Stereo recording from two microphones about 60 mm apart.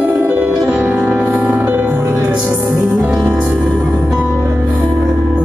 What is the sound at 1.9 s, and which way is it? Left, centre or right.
Music, right.